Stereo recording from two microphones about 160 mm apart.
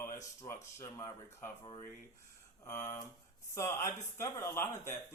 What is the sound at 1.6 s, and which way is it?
Speech, 30° left (ahead or behind).